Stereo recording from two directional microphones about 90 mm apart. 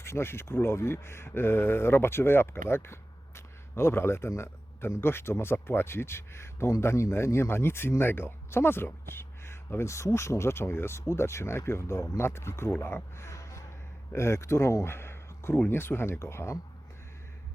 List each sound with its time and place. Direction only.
0.0 s speech: 30° left (ahead or behind)
12.8 s a sound: 30° left (ahead or behind)
14.1 s speech: 30° left (ahead or behind)